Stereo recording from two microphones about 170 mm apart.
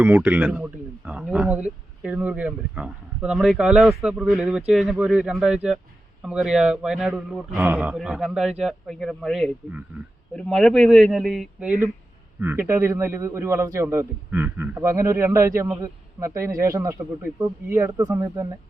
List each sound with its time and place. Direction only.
0.0 s a man's voice: 10° right (ahead or behind)